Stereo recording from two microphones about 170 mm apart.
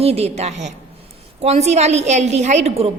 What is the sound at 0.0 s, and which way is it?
A woman's voice, 35° right (ahead or behind).